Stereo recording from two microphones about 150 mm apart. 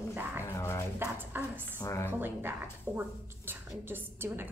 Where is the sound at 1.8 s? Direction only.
20° left (ahead or behind).